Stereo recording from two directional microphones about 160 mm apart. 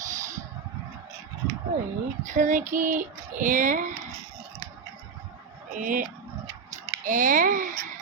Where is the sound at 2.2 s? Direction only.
50° right (ahead or behind).